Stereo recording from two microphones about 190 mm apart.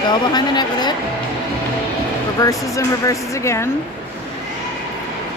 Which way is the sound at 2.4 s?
15° left (ahead or behind).